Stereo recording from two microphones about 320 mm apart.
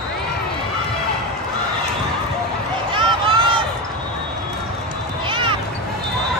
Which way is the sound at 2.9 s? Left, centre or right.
Centre.